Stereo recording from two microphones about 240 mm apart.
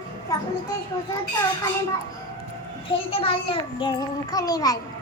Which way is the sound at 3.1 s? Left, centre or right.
Left.